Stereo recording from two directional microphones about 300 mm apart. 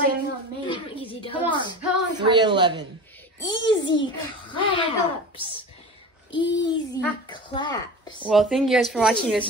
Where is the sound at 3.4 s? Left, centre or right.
Centre.